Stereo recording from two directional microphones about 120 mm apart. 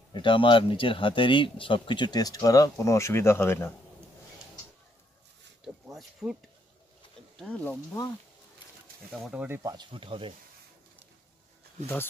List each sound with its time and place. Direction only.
0.1 s speech: 45° left (ahead or behind); by 3.7 s 20° left (ahead or behind)
5.9 s speech: centre (ahead or behind)
7.3 s speech: 10° left (ahead or behind)
9.2 s speech: 5° right (ahead or behind)
9.5 s speech: 30° right (ahead or behind)
9.9 s speech: 45° right (ahead or behind)